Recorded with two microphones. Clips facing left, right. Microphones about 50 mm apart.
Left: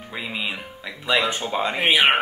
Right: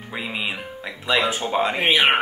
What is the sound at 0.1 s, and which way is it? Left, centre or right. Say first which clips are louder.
Speech: right 1 dB; centre.